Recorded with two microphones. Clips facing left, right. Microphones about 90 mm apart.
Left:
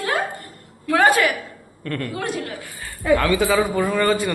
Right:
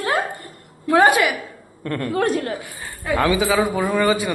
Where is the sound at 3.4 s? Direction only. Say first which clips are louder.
Even; 5° right (ahead or behind).